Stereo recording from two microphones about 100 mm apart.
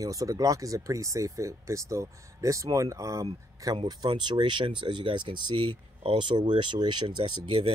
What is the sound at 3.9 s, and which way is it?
Speech, 45° right (ahead or behind).